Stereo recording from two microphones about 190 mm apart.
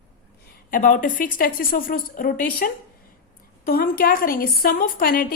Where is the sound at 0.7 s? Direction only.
45° left (ahead or behind).